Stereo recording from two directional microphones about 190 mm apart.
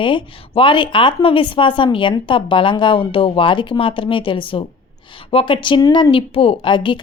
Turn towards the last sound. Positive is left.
turn(degrees=25)  # may be behind; listen again after turning